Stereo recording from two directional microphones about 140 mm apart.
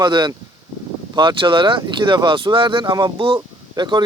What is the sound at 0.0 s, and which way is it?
Speech, 30° right (ahead or behind).